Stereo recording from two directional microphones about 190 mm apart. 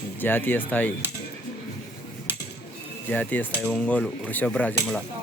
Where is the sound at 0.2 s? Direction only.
10° left (ahead or behind).